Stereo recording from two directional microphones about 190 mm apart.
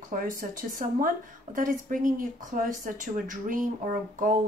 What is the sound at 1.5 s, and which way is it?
Speech, 45° right (ahead or behind).